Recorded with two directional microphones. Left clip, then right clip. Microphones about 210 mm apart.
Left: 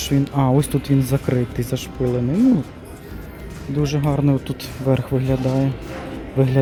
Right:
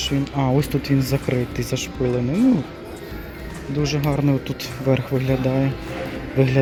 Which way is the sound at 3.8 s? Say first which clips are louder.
Left 1 dB; 10° left (ahead or behind).